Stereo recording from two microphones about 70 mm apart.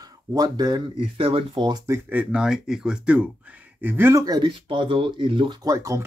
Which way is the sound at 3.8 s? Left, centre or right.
Right.